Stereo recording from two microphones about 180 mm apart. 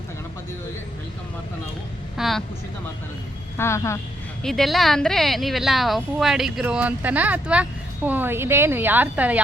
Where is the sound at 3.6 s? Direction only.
15° left (ahead or behind).